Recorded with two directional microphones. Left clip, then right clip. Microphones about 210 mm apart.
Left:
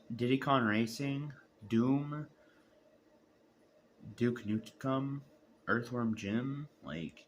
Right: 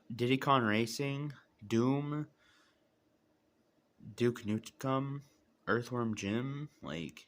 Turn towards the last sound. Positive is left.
turn(degrees=-55)  # may be behind; listen again after turning